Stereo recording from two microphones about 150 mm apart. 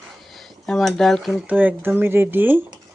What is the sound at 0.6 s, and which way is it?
Speech, centre (ahead or behind).